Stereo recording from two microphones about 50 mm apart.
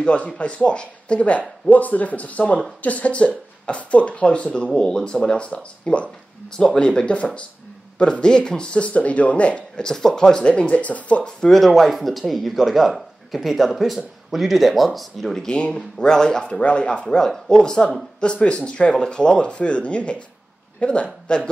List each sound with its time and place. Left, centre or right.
0.0 s speech: left
9.8 s speech: centre; by 11.2 s left
11.2 s speech: centre
11.6 s speech: centre
15.4 s speech: centre